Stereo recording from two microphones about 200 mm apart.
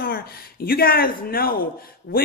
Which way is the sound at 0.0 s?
50° left (ahead or behind).